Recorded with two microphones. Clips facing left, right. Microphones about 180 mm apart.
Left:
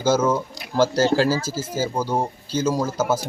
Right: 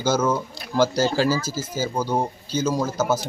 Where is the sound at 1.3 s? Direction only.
30° left (ahead or behind).